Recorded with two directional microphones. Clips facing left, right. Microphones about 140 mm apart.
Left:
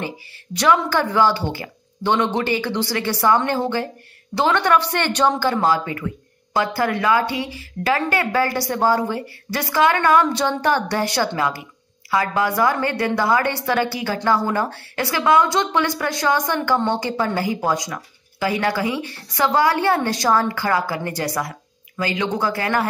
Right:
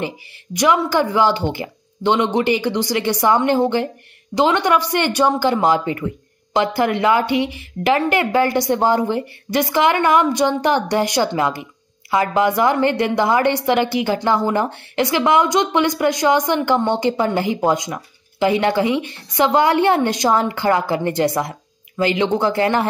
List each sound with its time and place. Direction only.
0.0 s a woman's voice: 15° right (ahead or behind)